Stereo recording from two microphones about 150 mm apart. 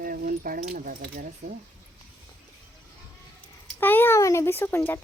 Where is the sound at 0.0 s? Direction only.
75° right (ahead or behind).